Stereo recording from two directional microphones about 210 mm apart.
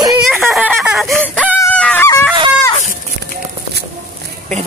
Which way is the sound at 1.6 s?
5° left (ahead or behind).